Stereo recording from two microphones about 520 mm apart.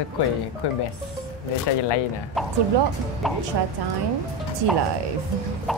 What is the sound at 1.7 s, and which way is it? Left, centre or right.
Speech, left.